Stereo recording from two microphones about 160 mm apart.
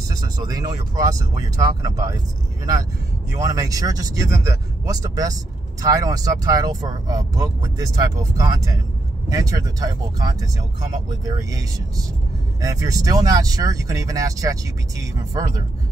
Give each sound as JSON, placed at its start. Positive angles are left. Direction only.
{"t": 0.1, "sound": "speech", "side_deg": -25}
{"t": 3.3, "sound": "speech", "side_deg": -20}
{"t": 12.6, "sound": "speech", "side_deg": -20}